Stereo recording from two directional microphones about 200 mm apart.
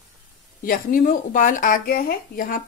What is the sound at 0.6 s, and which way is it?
Speech, 45° left (ahead or behind).